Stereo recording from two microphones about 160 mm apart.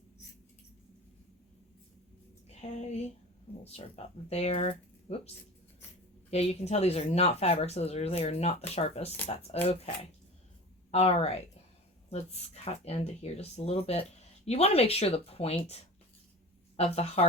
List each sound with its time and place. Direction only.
2.5 s a sound: 45° left (ahead or behind)
3.6 s speech: 40° left (ahead or behind)
6.3 s speech: 40° left (ahead or behind)
12.6 s speech: 40° left (ahead or behind)
16.7 s speech: 40° left (ahead or behind)